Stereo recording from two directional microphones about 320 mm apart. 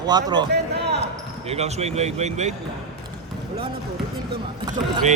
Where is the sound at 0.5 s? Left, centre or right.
Right.